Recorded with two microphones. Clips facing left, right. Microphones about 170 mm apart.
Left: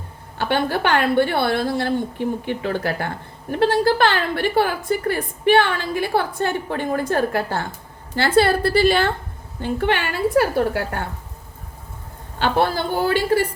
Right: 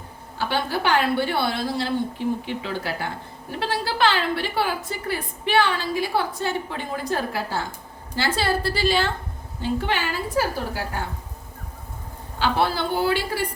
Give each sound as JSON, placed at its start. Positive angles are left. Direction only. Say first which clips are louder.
{"t": 0.3, "sound": "a woman's voice", "louder": "left 4 dB", "side_deg": 60}
{"t": 12.4, "sound": "a woman's voice", "louder": "left 3 dB", "side_deg": 50}